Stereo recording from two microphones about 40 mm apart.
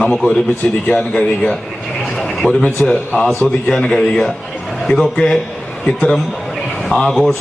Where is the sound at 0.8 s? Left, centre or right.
Left.